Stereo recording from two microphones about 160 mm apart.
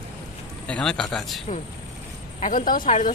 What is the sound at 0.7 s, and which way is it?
Speech, 5° left (ahead or behind).